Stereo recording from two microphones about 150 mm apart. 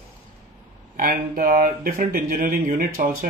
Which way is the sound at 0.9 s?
75° right (ahead or behind).